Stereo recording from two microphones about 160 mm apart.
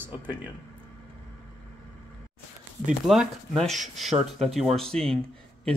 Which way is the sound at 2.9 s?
Centre (ahead or behind).